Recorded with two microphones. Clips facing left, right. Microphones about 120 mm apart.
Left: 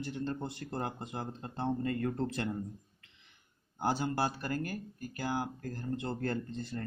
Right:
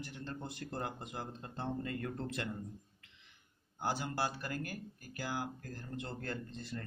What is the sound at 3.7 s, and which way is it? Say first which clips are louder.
Speech: left 5 dB; 30° left (ahead or behind).